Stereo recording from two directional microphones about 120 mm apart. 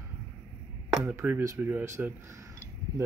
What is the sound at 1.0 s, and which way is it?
Speech, 20° right (ahead or behind).